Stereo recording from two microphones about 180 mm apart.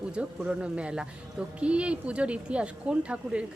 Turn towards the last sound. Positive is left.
turn(degrees=-5)  # may be behind; listen again after turning